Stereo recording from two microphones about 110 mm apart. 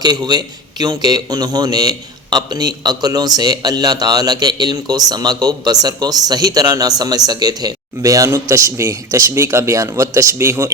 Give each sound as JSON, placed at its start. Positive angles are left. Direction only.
{"t": 0.0, "sound": "a man's voice", "side_deg": -40}